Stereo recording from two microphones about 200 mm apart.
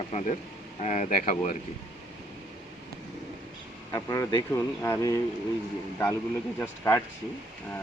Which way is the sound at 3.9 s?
15° left (ahead or behind).